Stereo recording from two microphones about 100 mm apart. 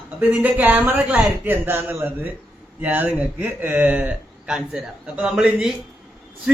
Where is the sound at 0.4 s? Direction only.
15° right (ahead or behind).